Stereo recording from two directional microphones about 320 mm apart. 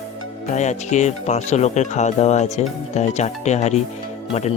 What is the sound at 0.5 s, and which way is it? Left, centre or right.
Speech, left.